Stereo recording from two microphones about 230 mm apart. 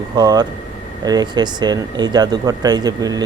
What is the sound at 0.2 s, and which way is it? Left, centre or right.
Speech, centre.